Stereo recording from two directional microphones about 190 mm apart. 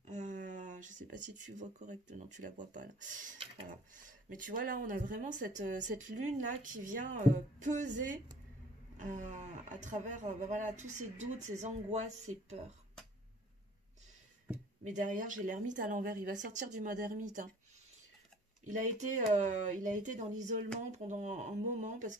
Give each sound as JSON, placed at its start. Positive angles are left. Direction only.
{"t": 0.0, "sound": "speech", "side_deg": -40}
{"t": 14.9, "sound": "speech", "side_deg": -40}
{"t": 18.6, "sound": "speech", "side_deg": -40}